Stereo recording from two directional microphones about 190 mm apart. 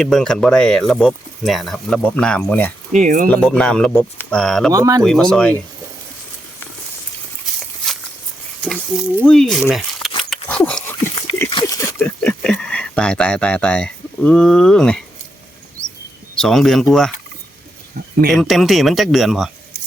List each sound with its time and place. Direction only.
0.0 s speech: centre (ahead or behind)
2.9 s speech: 40° right (ahead or behind)
3.2 s speech: 5° left (ahead or behind)
4.7 s speech: 20° right (ahead or behind)
5.0 s speech: 5° left (ahead or behind)
8.6 s speech: 5° left (ahead or behind)
10.2 s a sound: 5° left (ahead or behind)
16.3 s speech: 5° left (ahead or behind)
18.3 s speech: centre (ahead or behind)